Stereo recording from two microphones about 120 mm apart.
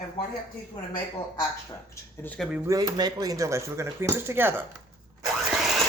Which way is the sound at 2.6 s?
30° right (ahead or behind).